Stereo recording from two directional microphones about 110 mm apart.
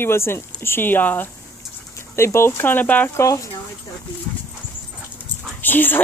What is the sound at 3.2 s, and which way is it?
Speech, 30° left (ahead or behind).